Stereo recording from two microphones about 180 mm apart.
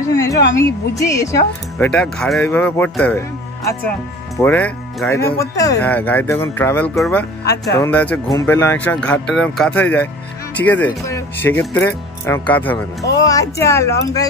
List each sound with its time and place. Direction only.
0.1 s speech: 20° left (ahead or behind)
1.9 s speech: 5° left (ahead or behind)
4.4 s speech: 10° left (ahead or behind)